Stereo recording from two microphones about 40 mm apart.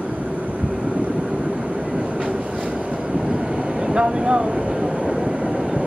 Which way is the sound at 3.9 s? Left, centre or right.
Right.